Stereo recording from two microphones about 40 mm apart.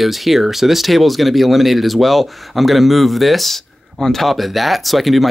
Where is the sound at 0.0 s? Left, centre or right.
Centre.